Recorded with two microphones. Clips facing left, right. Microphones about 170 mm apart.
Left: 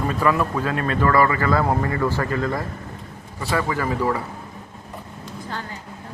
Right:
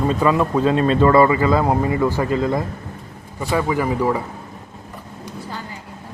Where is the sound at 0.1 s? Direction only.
20° right (ahead or behind).